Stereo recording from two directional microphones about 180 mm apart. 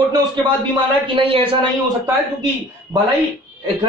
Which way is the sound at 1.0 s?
30° right (ahead or behind).